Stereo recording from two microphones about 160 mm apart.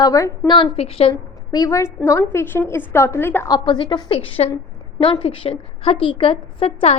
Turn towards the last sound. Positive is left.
turn(degrees=40)  # may be behind; listen again after turning